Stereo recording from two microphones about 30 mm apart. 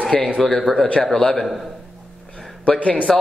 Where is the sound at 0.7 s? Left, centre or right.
Centre.